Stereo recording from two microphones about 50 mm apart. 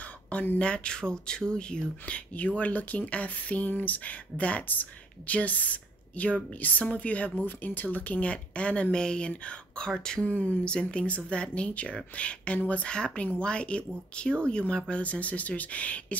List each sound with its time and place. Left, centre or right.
0.0 s a sound: left
0.6 s speech: centre
10.2 s speech: left